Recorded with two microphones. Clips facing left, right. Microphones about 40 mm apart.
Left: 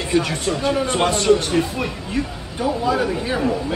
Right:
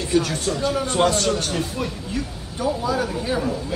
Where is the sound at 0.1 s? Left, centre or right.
Left.